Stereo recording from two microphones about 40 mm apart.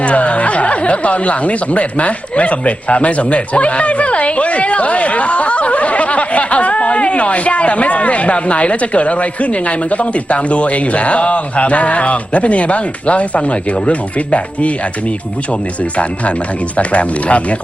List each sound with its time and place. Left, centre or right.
0.0 s speech: left
16.7 s speech: left